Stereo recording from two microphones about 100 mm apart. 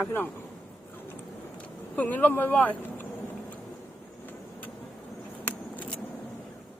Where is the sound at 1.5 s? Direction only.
15° left (ahead or behind).